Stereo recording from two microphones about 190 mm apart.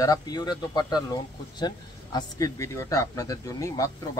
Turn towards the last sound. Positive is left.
turn(degrees=15)  # may be behind; listen again after turning